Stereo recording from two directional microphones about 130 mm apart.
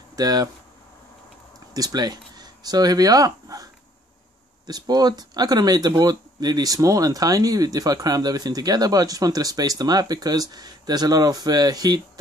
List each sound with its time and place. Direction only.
0.1 s speech: 30° right (ahead or behind)
1.7 s speech: 30° right (ahead or behind)